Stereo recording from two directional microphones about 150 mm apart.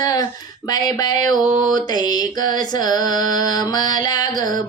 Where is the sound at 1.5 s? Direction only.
60° right (ahead or behind).